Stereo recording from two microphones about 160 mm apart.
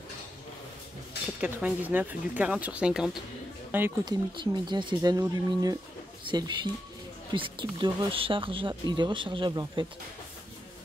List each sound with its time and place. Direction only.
1.4 s speech: 10° right (ahead or behind)
4.0 s speech: 30° right (ahead or behind)